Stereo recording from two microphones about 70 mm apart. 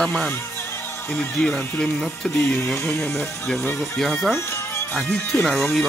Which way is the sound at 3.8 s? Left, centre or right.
Centre.